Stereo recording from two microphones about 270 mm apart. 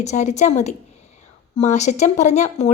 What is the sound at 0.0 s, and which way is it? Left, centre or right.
A woman's voice, left.